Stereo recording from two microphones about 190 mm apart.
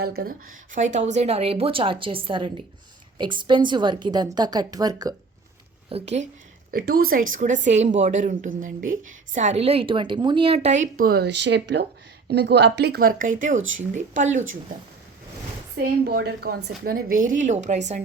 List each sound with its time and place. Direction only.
0.0 s a woman's voice: 55° right (ahead or behind); by 5.1 s 20° right (ahead or behind)
5.9 s a woman's voice: 35° right (ahead or behind)
6.7 s a woman's voice: 50° right (ahead or behind)
13.6 s speech: 90° right
13.9 s a woman's voice: 40° right (ahead or behind)
16.0 s a woman's voice: 55° right (ahead or behind); by 18.0 s 35° right (ahead or behind)